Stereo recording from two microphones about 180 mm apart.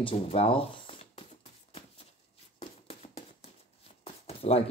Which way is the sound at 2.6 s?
35° left (ahead or behind).